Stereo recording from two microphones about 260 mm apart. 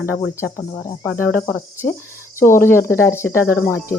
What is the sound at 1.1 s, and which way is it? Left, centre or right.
Cricket, left.